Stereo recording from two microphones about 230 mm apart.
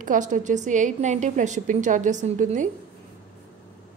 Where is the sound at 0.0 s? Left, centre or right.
Right.